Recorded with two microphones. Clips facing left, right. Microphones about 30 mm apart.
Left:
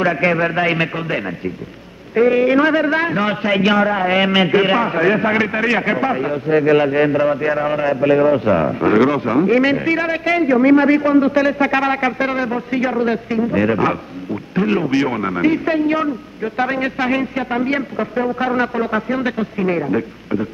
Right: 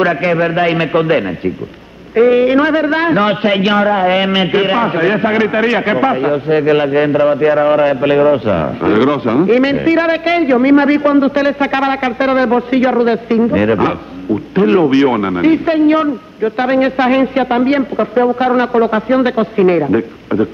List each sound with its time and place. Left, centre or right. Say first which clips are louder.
0.2 s a man's voice: right 3 dB; centre
0.9 s a man's voice: right 9 dB; right; by 3.0 s centre
3.0 s a man's voice: right 6 dB; right
7.8 s a man's voice: right 3 dB; right
8.2 s a man's voice: right 3 dB; right
10.0 s a man's voice: right 4 dB; right
13.5 s a man's voice: right 4 dB; right
15.0 s a man's voice: right 6 dB; right